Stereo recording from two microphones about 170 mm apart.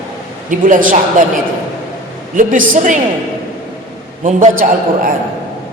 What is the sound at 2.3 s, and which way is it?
Speech, 50° right (ahead or behind).